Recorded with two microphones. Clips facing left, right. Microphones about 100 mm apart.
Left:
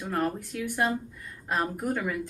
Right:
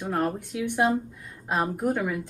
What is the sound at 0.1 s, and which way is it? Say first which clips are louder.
Speech: right 2 dB; 10° right (ahead or behind).